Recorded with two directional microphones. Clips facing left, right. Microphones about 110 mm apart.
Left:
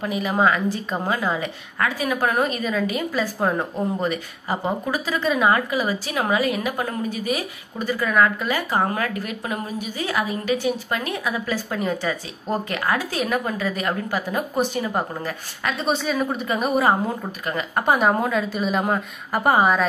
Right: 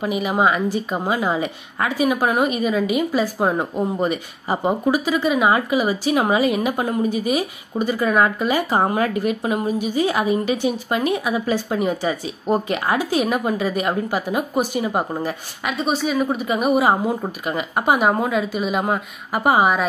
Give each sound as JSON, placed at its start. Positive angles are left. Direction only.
{"t": 0.0, "sound": "a woman's voice", "side_deg": -15}
{"t": 15.8, "sound": "a woman's voice", "side_deg": -5}